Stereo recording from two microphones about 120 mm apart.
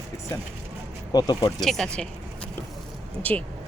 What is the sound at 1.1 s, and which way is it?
Speech, 30° left (ahead or behind).